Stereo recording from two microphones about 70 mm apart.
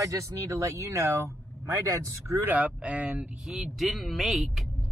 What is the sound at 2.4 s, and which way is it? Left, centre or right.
Speech, right.